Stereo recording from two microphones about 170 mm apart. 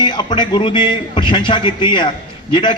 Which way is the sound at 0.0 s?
25° left (ahead or behind).